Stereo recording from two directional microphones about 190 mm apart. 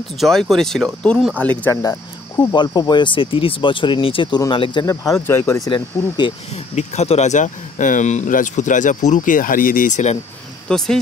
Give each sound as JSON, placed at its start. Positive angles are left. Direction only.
{"t": 0.2, "sound": "speech", "side_deg": 0}
{"t": 10.7, "sound": "speech", "side_deg": 5}